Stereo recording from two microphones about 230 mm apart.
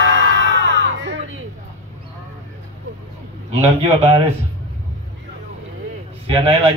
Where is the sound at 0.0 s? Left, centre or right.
Right.